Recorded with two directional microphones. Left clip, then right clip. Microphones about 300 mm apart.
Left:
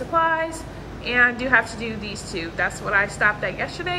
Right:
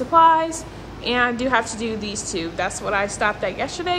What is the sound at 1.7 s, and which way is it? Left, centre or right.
Speech, right.